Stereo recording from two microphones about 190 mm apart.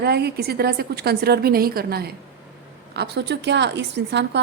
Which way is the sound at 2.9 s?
65° right (ahead or behind).